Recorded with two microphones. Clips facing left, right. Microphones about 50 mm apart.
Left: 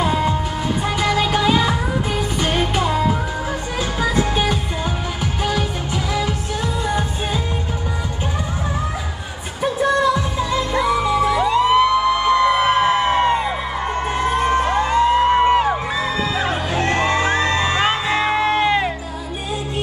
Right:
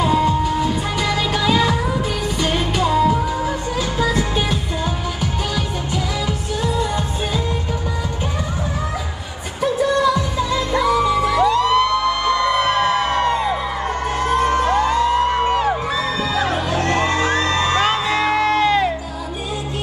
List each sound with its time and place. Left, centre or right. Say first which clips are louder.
0.0 s music: right 2 dB; left
9.6 s music: even; left